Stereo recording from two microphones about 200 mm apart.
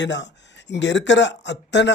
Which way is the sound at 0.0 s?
60° left (ahead or behind).